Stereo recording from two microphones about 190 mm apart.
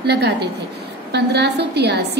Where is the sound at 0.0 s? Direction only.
60° right (ahead or behind).